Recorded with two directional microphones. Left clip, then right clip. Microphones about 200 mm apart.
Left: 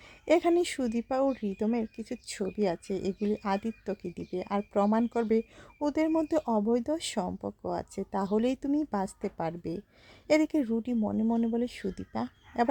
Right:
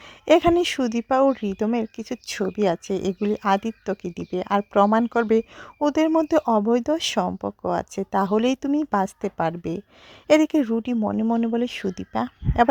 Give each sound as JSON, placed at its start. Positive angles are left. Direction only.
{"t": 0.3, "sound": "speech", "side_deg": -25}